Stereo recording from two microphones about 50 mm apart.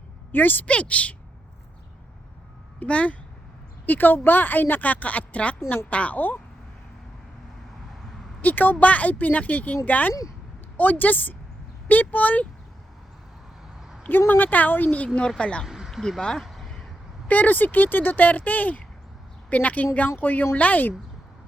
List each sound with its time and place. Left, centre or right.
0.3 s speech: left
0.7 s a woman's voice: left
2.8 s a woman's voice: left
3.8 s a woman's voice: left
8.4 s speech: left
14.3 s speech: left
15.0 s a woman's voice: left
15.6 s a sound: centre
15.9 s speech: centre
16.5 s a sound: centre
17.2 s speech: left